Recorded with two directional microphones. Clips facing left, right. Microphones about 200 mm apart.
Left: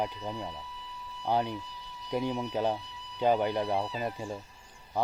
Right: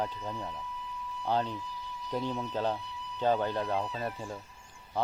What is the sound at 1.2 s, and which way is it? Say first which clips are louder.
Speech: left 2 dB; 10° left (ahead or behind).